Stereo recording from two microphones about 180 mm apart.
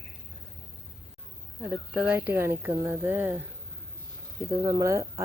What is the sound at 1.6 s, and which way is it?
A woman's voice, 10° right (ahead or behind).